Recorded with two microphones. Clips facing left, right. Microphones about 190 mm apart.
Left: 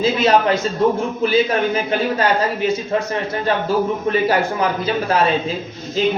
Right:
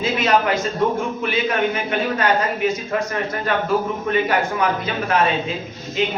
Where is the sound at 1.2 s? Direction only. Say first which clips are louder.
Left 6 dB; 35° left (ahead or behind).